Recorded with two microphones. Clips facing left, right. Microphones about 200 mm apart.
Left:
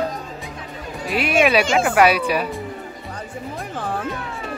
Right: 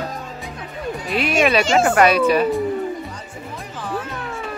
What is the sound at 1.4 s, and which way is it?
A woman's voice, 10° left (ahead or behind).